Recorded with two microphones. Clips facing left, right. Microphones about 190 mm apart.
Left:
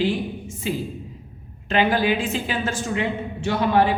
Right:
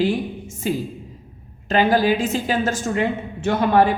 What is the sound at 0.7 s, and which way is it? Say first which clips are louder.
A woman's voice: right 3 dB; 45° right (ahead or behind).